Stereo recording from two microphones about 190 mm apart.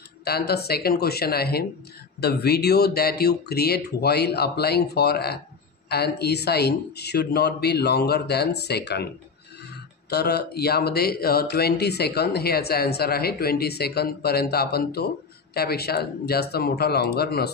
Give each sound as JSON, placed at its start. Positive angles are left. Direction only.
{"t": 0.2, "sound": "speech", "side_deg": 55}